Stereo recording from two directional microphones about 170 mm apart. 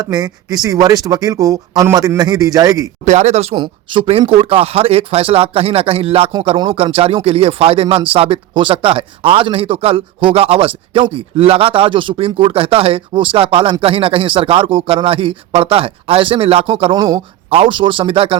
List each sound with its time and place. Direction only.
0.0 s speech: 20° right (ahead or behind)
3.0 s speech: 40° right (ahead or behind)